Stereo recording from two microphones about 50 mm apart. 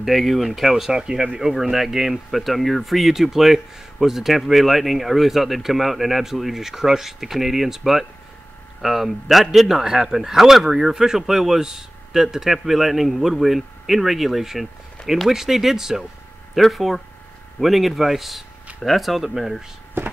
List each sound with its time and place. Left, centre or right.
0.0 s speech: centre